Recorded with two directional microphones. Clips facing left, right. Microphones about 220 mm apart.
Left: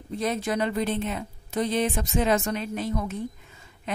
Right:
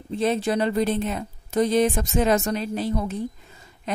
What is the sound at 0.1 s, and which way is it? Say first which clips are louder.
A woman's voice: right 4 dB; 30° right (ahead or behind).